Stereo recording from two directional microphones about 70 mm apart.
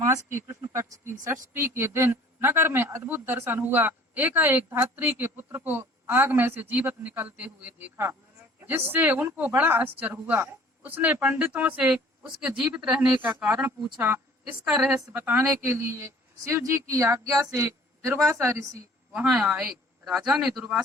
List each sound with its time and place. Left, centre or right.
0.0 s a woman's voice: right
12.4 s speech: centre
13.2 s a woman's voice: right
15.1 s a woman's voice: right
15.6 s speech: right
16.6 s a woman's voice: right
17.5 s a woman's voice: right
19.3 s speech: centre